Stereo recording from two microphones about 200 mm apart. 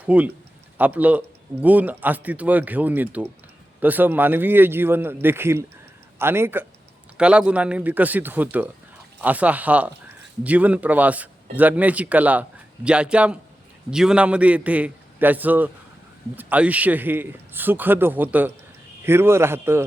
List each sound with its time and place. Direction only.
0.0 s speech: 5° right (ahead or behind)